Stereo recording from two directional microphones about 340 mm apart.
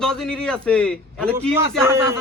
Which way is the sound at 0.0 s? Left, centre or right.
Centre.